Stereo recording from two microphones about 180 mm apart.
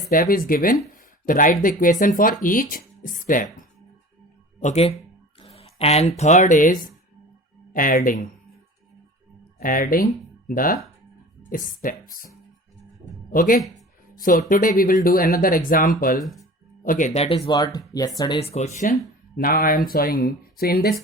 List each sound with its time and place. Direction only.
0.1 s speech: 55° left (ahead or behind)
4.6 s speech: 35° left (ahead or behind)
9.6 s speech: 50° left (ahead or behind)
13.3 s speech: 50° left (ahead or behind)
17.2 s speech: 30° left (ahead or behind)
18.3 s speech: 35° left (ahead or behind)
19.4 s speech: 50° left (ahead or behind)